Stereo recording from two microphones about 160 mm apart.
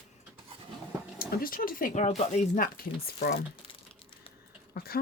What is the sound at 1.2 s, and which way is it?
Speech, 65° left (ahead or behind).